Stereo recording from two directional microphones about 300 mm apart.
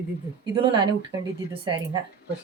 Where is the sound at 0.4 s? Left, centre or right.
Centre.